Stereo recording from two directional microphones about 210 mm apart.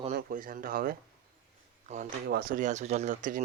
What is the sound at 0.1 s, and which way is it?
Speech, 40° right (ahead or behind).